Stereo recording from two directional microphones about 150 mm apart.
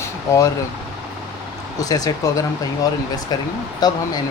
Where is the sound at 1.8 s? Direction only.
25° left (ahead or behind).